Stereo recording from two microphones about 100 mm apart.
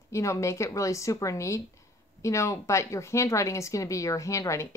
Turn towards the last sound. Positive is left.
turn(degrees=30)  # may be behind; listen again after turning